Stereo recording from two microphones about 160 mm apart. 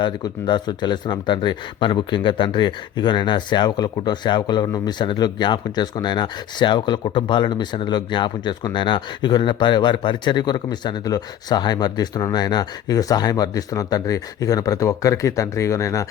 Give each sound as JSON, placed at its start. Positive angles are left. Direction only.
{"t": 0.0, "sound": "speech", "side_deg": 30}